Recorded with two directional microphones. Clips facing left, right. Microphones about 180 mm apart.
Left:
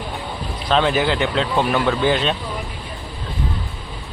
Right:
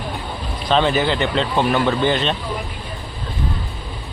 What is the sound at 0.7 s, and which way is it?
Speech, centre (ahead or behind).